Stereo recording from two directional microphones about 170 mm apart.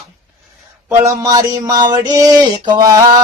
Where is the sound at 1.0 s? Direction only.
20° right (ahead or behind).